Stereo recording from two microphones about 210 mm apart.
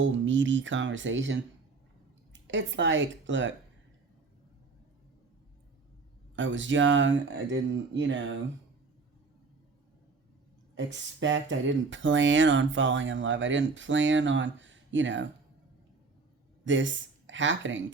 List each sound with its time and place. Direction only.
0.0 s a woman's voice: 60° right (ahead or behind)
6.3 s speech: 60° right (ahead or behind)
10.8 s speech: 60° right (ahead or behind)
16.6 s speech: 60° right (ahead or behind)